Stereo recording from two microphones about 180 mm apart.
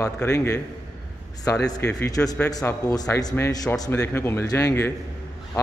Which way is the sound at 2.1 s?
20° left (ahead or behind).